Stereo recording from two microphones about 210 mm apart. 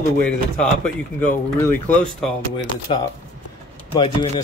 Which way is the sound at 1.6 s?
5° left (ahead or behind).